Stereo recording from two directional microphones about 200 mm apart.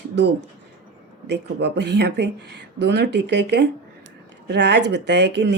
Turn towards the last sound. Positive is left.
turn(degrees=-60)  # may be behind; listen again after turning